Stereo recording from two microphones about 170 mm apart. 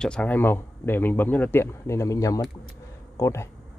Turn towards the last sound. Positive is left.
turn(degrees=15)  # may be behind; listen again after turning